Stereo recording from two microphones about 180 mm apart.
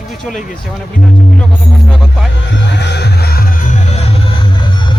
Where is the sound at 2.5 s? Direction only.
75° left (ahead or behind); by 3.7 s 55° left (ahead or behind).